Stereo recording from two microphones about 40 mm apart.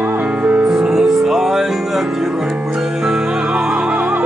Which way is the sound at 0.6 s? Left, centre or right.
Centre.